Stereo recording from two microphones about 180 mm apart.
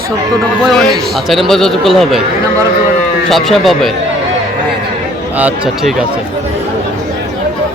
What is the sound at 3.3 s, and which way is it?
Speech, centre (ahead or behind).